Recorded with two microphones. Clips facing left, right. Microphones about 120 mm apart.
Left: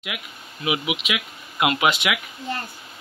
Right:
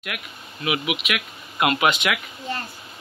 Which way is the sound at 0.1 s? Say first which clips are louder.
Right 1 dB; 15° left (ahead or behind).